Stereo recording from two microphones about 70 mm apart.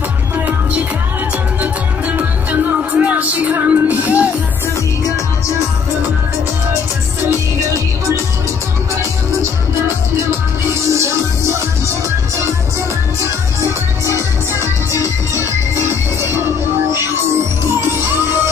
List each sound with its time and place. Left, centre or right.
0.5 s music: centre
10.9 s music: right
14.0 s music: left
15.7 s music: right